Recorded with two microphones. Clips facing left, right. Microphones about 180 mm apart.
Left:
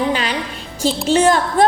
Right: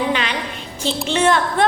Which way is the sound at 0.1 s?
40° left (ahead or behind).